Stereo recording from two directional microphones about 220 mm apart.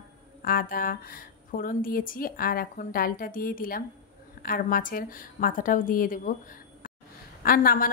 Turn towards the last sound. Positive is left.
turn(degrees=40)  # may be behind; listen again after turning